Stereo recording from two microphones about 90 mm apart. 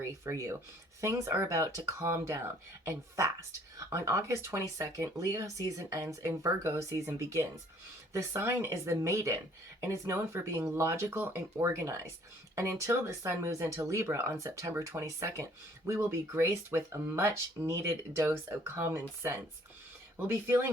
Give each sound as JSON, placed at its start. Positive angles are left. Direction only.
{"t": 0.0, "sound": "speech", "side_deg": -35}
{"t": 3.8, "sound": "speech", "side_deg": -35}